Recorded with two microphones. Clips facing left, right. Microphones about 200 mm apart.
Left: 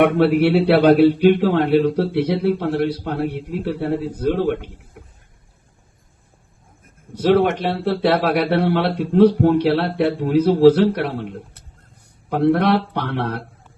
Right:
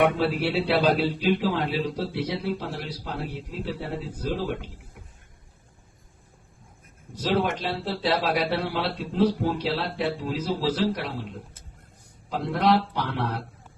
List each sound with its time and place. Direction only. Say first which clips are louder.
0.0 s a man's voice: left 8 dB; 60° left (ahead or behind)
7.2 s a man's voice: left 9 dB; 65° left (ahead or behind)